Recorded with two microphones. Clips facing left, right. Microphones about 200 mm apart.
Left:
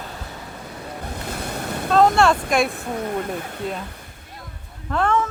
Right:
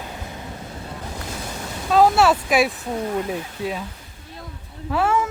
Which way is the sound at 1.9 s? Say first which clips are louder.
Even; 5° right (ahead or behind).